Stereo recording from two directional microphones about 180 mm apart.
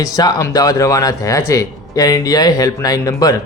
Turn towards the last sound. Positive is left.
turn(degrees=20)  # may be behind; listen again after turning